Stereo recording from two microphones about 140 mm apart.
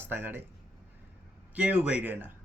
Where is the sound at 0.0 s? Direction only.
15° right (ahead or behind).